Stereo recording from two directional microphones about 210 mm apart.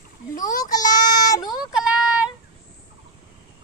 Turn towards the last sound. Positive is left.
turn(degrees=-5)  # may be behind; listen again after turning